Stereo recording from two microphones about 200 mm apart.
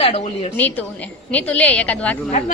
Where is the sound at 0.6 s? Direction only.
10° left (ahead or behind).